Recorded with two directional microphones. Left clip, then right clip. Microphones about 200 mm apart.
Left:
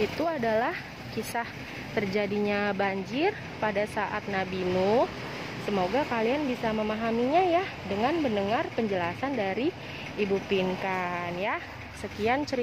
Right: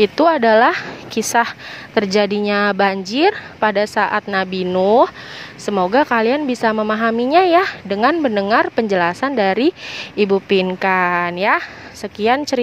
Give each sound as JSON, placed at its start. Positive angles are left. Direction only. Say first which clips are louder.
{"t": 0.0, "sound": "a woman's voice", "louder": "right 15 dB", "side_deg": -40}